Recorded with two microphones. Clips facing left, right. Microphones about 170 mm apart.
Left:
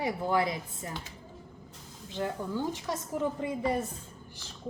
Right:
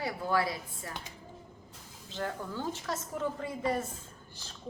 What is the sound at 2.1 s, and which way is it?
A woman's voice, 15° left (ahead or behind).